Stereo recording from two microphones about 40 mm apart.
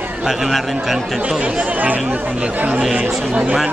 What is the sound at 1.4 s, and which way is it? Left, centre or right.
Speech, right.